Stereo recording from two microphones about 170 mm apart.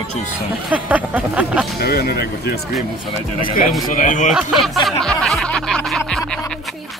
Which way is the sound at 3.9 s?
50° left (ahead or behind).